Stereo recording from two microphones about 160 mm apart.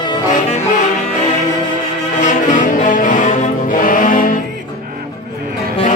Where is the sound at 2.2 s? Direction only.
50° left (ahead or behind).